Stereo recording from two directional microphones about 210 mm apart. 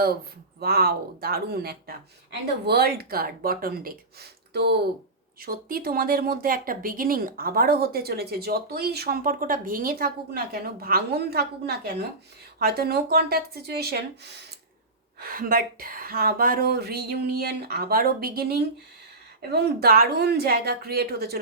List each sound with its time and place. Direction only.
0.6 s speech: 50° right (ahead or behind)